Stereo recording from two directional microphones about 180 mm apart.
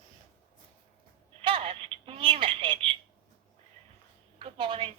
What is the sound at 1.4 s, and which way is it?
Telephone, 30° right (ahead or behind).